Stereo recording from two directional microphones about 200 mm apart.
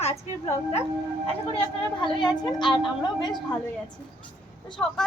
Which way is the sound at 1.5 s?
25° left (ahead or behind).